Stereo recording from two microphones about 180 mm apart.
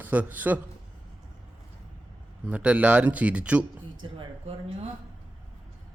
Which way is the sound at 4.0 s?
30° right (ahead or behind).